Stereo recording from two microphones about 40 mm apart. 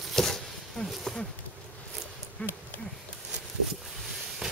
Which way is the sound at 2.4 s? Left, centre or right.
Left.